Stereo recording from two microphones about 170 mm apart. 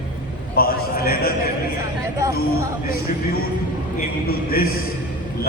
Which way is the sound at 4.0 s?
60° left (ahead or behind).